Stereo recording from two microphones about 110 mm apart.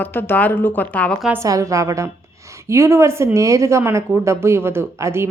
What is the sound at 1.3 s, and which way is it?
A woman's voice, 30° right (ahead or behind).